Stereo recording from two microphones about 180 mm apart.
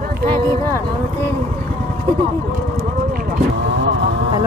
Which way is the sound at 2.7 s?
50° right (ahead or behind).